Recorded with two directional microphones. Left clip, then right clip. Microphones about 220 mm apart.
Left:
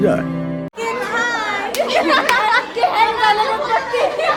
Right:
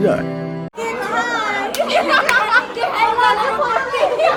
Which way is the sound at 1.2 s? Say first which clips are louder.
Even; 5° right (ahead or behind).